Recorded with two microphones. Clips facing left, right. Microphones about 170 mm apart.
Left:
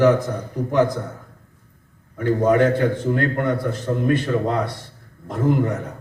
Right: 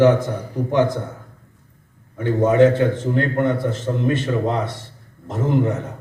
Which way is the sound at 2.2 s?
25° right (ahead or behind).